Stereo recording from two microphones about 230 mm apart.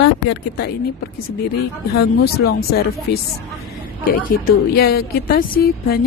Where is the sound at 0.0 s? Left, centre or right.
Left.